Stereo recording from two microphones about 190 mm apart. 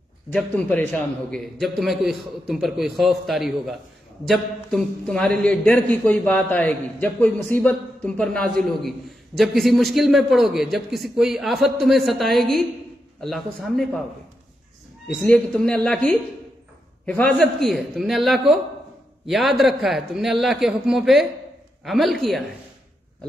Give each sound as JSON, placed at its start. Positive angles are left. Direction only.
{"t": 0.3, "sound": "a man's voice", "side_deg": 5}
{"t": 15.2, "sound": "a man's voice", "side_deg": 5}